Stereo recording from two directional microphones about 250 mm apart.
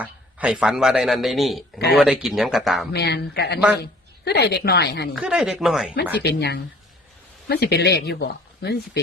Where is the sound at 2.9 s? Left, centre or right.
Left.